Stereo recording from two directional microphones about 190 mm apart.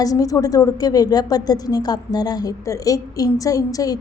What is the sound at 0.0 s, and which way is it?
A woman's voice, 20° left (ahead or behind).